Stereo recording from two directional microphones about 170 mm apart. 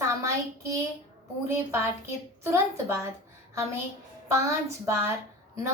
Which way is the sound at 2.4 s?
15° right (ahead or behind).